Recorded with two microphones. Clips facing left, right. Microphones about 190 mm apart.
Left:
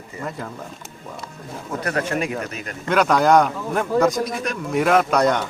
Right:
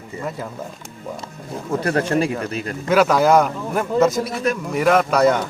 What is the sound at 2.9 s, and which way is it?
A man's voice, 5° right (ahead or behind).